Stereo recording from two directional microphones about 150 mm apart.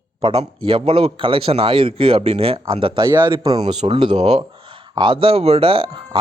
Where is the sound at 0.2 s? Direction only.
35° right (ahead or behind).